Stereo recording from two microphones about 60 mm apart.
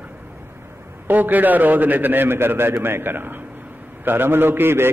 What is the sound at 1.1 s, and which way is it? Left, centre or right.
A man's voice, right.